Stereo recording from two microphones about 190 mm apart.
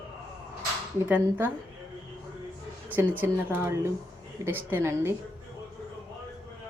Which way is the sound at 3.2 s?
10° right (ahead or behind).